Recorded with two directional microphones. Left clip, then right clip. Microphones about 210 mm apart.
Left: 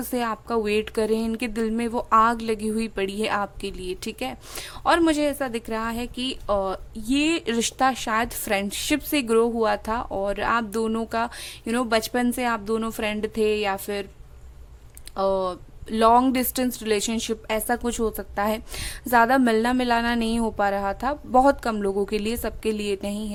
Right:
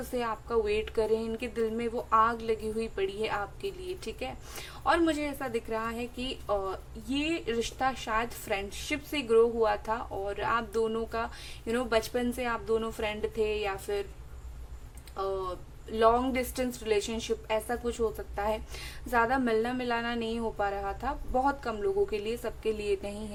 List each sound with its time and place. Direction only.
0.1 s a woman's voice: 50° left (ahead or behind)
15.1 s a woman's voice: 50° left (ahead or behind)